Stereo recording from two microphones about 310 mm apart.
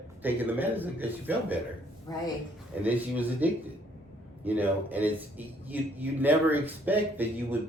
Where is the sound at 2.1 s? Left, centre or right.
Centre.